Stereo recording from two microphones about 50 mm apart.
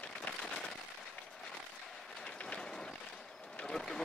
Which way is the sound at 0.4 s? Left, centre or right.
Centre.